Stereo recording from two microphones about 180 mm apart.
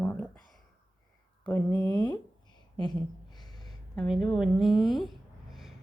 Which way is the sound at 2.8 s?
25° left (ahead or behind).